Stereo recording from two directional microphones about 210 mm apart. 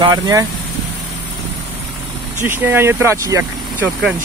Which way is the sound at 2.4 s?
10° right (ahead or behind).